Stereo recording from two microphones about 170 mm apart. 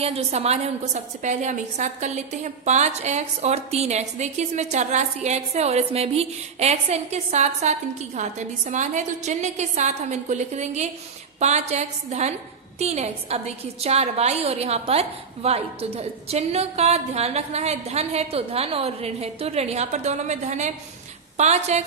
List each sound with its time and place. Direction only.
0.0 s a woman's voice: 35° right (ahead or behind)